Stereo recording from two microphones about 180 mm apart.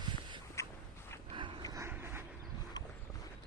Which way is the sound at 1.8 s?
15° right (ahead or behind).